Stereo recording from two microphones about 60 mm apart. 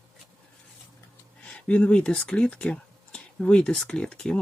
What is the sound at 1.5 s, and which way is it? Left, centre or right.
Speech, left.